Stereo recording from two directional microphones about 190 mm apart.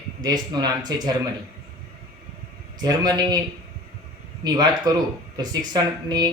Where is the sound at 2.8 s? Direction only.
20° right (ahead or behind).